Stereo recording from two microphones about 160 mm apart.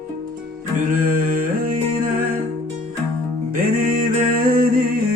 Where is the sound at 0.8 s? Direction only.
55° right (ahead or behind).